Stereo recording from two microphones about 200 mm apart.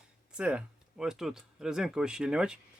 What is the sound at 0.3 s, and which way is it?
Speech, 5° right (ahead or behind).